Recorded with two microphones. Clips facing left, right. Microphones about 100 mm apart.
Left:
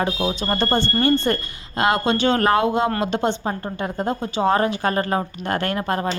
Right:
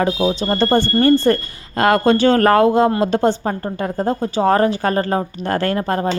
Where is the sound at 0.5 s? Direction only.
35° right (ahead or behind).